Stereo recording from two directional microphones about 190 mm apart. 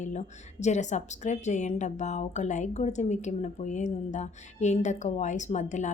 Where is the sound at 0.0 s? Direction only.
35° left (ahead or behind).